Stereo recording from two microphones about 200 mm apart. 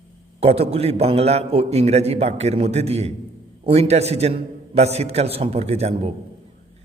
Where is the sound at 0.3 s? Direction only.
30° right (ahead or behind).